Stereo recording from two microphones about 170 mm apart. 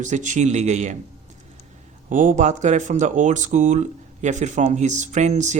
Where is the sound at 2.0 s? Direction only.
50° right (ahead or behind).